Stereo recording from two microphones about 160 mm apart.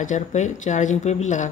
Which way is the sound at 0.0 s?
50° left (ahead or behind).